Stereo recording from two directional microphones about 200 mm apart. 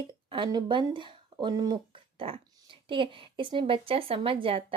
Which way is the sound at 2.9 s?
25° right (ahead or behind).